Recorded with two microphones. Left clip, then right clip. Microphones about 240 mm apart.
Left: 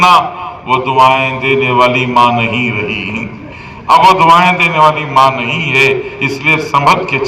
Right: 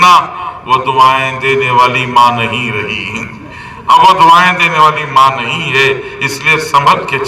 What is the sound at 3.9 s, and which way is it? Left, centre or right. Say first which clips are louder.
Speech: right 1 dB; left.